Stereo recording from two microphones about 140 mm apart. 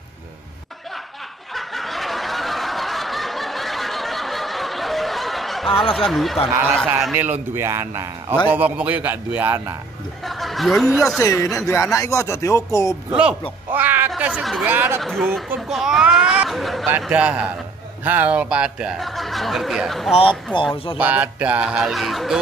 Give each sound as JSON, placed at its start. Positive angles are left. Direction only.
{"t": 1.5, "sound": "snicker", "side_deg": 0}
{"t": 5.9, "sound": "speech", "side_deg": 0}
{"t": 7.5, "sound": "speech", "side_deg": -20}
{"t": 10.2, "sound": "speech", "side_deg": 0}
{"t": 11.1, "sound": "speech", "side_deg": 25}
{"t": 13.1, "sound": "speech", "side_deg": -5}
{"t": 15.0, "sound": "speech", "side_deg": 0}
{"t": 20.7, "sound": "speech", "side_deg": 40}
{"t": 21.0, "sound": "speech", "side_deg": -10}